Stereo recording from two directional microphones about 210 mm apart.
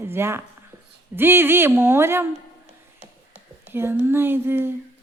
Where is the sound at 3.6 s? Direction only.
10° right (ahead or behind).